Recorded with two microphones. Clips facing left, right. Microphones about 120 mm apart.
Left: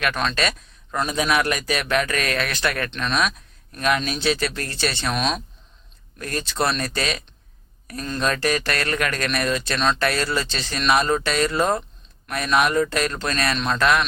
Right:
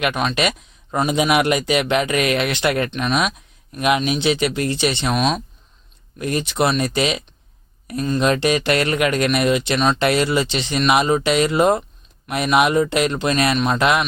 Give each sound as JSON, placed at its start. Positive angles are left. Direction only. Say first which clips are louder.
{"t": 0.0, "sound": "a man's voice", "louder": "right 3 dB", "side_deg": -10}
{"t": 5.1, "sound": "speech", "louder": "right 4 dB", "side_deg": -5}
{"t": 6.1, "sound": "a man's voice", "louder": "right 5 dB", "side_deg": -15}